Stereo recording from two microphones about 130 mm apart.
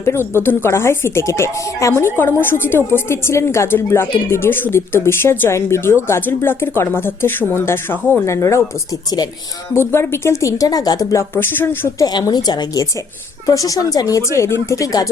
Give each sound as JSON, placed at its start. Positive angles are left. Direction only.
{"t": 0.0, "sound": "a woman's voice", "side_deg": 20}
{"t": 9.7, "sound": "a woman's voice", "side_deg": 20}
{"t": 12.0, "sound": "a woman's voice", "side_deg": 30}